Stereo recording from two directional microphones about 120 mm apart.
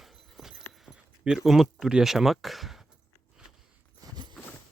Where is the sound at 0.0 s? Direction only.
Centre (ahead or behind).